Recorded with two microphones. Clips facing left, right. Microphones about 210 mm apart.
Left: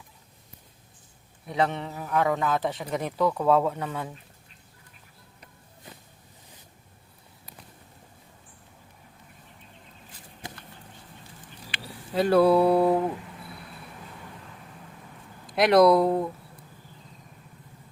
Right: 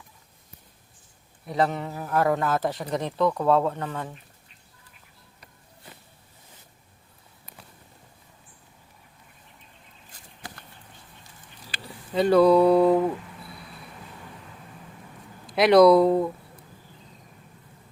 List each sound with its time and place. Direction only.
1.5 s a man's voice: centre (ahead or behind)
10.4 s vehicle: 20° left (ahead or behind)
11.8 s speech: 5° left (ahead or behind)
15.4 s speech: centre (ahead or behind)